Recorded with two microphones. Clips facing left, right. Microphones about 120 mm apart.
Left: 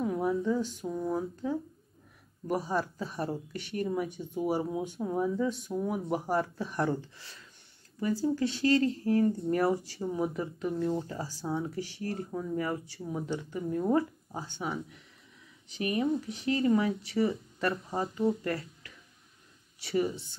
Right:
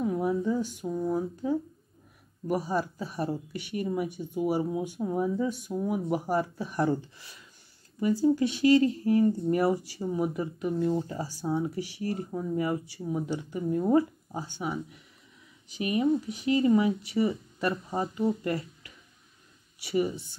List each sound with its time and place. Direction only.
0.0 s a sound: 5° right (ahead or behind)
2.4 s speech: 10° right (ahead or behind)
8.0 s speech: 15° right (ahead or behind)
10.3 s speech: 10° right (ahead or behind)
16.0 s speech: centre (ahead or behind)
19.8 s speech: 10° right (ahead or behind)